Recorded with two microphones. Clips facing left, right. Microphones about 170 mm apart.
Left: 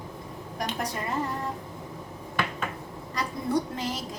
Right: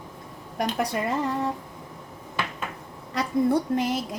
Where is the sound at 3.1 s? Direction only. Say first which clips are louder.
Right 6 dB; 60° right (ahead or behind).